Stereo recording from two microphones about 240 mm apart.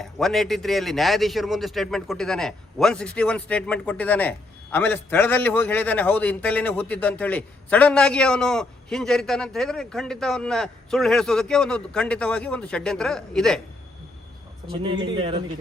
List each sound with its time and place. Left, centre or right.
0.0 s a man's voice: centre
14.8 s speech: centre